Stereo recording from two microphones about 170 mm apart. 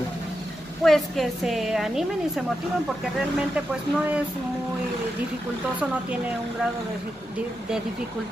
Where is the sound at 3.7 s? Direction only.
10° right (ahead or behind).